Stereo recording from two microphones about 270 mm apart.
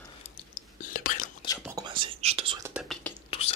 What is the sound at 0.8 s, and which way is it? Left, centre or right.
Whispering, left.